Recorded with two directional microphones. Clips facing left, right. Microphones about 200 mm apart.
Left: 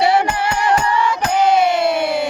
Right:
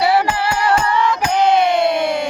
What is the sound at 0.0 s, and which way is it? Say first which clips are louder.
Music: even; 25° left (ahead or behind).